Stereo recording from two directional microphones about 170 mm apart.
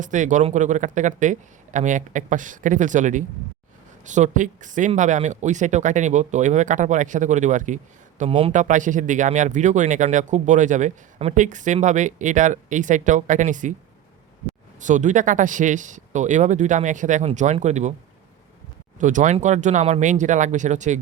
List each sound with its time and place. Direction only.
0.0 s speech: 45° right (ahead or behind)
8.3 s a man's voice: 35° right (ahead or behind)
8.5 s speech: 45° right (ahead or behind)
14.8 s speech: 45° right (ahead or behind)
18.9 s speech: 50° right (ahead or behind)